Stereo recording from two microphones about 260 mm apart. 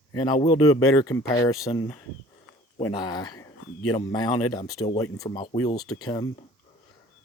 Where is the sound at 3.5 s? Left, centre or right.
Left.